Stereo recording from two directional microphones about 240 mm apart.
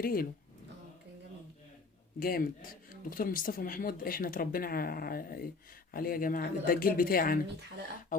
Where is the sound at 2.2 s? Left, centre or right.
Left.